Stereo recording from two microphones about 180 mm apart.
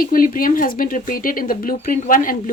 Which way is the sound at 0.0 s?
50° left (ahead or behind).